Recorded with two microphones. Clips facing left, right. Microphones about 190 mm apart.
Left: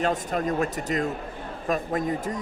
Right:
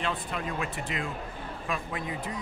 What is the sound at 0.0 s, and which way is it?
Speech, 45° left (ahead or behind).